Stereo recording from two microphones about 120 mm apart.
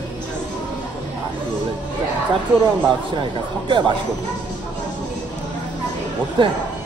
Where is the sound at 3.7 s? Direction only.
40° right (ahead or behind).